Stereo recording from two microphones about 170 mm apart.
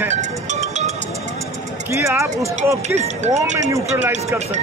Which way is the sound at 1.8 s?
15° right (ahead or behind).